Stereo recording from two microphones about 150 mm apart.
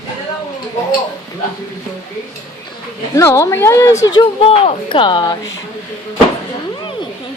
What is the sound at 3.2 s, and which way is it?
Speech, 20° left (ahead or behind).